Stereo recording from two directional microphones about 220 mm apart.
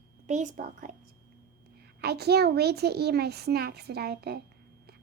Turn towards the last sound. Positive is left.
turn(degrees=-45)  # may be behind; listen again after turning